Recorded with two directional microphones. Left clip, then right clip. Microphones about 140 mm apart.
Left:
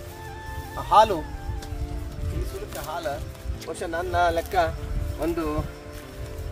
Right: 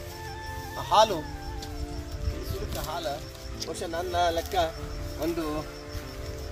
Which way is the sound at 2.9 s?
Centre (ahead or behind).